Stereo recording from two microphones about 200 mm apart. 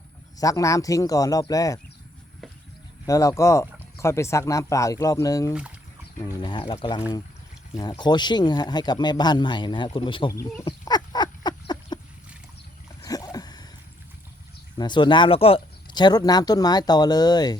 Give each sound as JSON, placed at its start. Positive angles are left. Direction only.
{"t": 0.3, "sound": "speech", "side_deg": 15}
{"t": 3.1, "sound": "speech", "side_deg": 15}
{"t": 13.1, "sound": "a sound", "side_deg": 20}
{"t": 14.8, "sound": "speech", "side_deg": 20}